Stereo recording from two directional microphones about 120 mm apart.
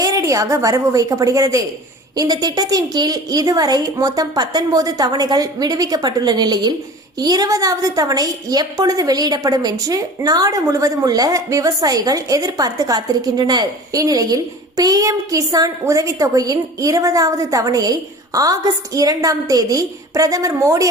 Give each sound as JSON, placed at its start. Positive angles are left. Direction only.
{"t": 0.0, "sound": "a woman's voice", "side_deg": -30}